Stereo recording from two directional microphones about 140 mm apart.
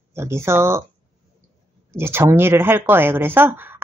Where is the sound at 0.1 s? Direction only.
20° right (ahead or behind).